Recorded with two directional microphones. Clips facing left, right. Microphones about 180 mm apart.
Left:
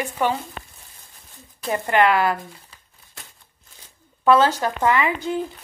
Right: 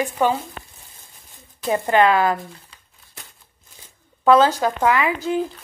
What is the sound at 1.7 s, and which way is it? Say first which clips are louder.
Speech: right 2 dB; 20° right (ahead or behind).